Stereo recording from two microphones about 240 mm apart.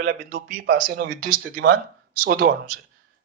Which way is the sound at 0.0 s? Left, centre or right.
Right.